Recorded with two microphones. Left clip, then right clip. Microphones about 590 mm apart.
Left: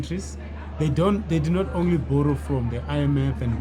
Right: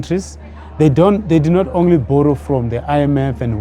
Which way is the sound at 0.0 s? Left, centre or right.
Right.